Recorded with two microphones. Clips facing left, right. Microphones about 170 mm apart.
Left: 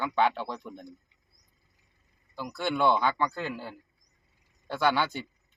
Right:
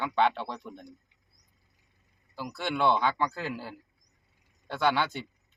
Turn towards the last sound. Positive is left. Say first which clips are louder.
# left 1 dB
turn(degrees=0)  # may be behind; listen again after turning